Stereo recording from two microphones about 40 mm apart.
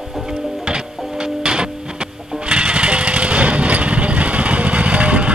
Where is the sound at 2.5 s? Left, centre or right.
Right.